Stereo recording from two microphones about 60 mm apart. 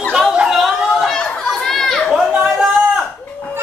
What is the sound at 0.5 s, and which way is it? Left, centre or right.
Chatter, centre.